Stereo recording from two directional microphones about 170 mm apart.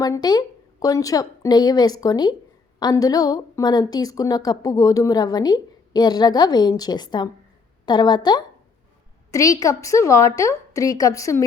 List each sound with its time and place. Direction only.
0.0 s a woman's voice: 20° left (ahead or behind)